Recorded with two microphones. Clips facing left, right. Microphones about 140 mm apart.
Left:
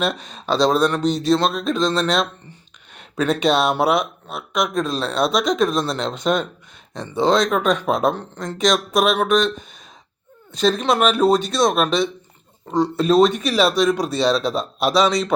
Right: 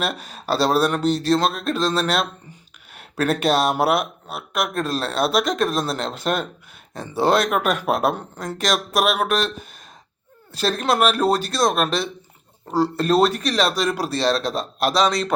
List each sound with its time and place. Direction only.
0.0 s speech: 5° right (ahead or behind)